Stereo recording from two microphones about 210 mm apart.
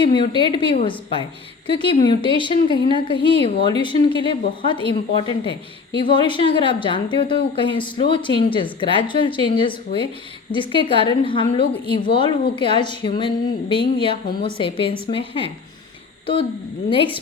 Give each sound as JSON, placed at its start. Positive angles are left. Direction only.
{"t": 0.0, "sound": "a woman's voice", "side_deg": 25}